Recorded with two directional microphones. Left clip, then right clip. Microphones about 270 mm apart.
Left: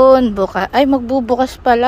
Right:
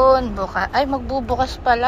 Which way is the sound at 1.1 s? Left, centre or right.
Left.